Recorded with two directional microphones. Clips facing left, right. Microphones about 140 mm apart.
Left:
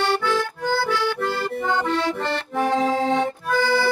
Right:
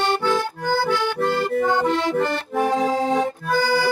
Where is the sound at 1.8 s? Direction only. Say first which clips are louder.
Right 2 dB; 15° right (ahead or behind).